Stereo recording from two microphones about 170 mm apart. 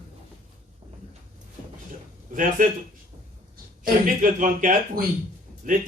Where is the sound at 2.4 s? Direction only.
50° right (ahead or behind).